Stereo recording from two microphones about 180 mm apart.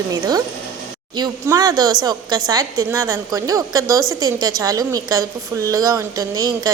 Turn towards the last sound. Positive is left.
turn(degrees=-20)  # may be behind; listen again after turning